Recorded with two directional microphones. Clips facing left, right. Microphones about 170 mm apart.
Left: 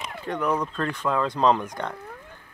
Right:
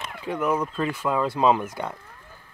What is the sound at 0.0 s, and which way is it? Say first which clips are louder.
Speech: right 1 dB; 5° right (ahead or behind).